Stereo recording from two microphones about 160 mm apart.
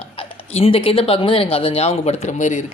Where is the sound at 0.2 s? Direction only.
35° left (ahead or behind).